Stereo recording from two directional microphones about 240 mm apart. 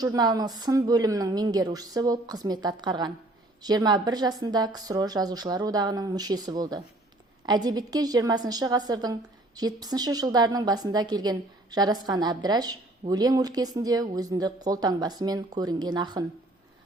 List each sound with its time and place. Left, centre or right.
0.0 s a woman's voice: centre